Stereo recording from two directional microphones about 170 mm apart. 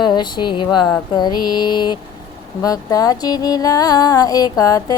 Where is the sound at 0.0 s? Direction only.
25° left (ahead or behind).